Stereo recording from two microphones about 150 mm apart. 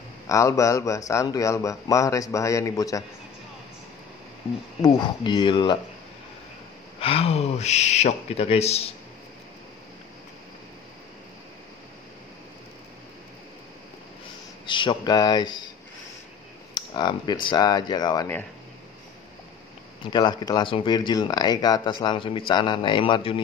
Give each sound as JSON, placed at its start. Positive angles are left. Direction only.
{"t": 0.3, "sound": "a man's voice", "side_deg": 20}
{"t": 4.8, "sound": "speech", "side_deg": 30}
{"t": 7.0, "sound": "speech", "side_deg": 40}
{"t": 14.7, "sound": "a man's voice", "side_deg": 30}
{"t": 16.7, "sound": "a man's voice", "side_deg": 30}
{"t": 20.1, "sound": "a man's voice", "side_deg": 30}